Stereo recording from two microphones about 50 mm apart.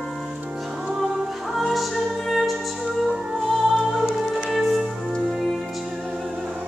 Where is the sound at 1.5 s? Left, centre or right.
Centre.